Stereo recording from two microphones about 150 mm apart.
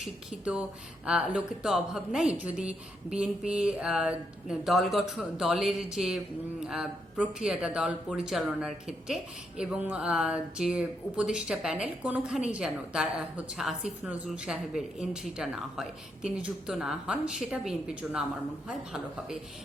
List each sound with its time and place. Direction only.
0.3 s speech: 5° right (ahead or behind)